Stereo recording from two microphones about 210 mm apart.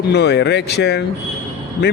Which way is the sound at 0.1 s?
55° left (ahead or behind).